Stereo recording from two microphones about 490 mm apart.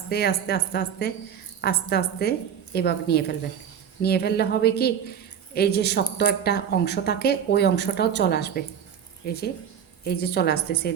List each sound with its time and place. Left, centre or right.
0.1 s speech: centre